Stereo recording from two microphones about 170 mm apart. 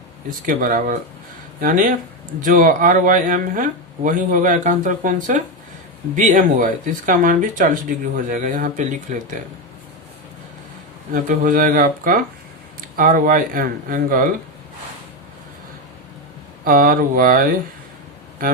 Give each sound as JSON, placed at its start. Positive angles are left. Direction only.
{"t": 0.4, "sound": "speech", "side_deg": -55}
{"t": 11.1, "sound": "speech", "side_deg": -50}
{"t": 16.6, "sound": "speech", "side_deg": -55}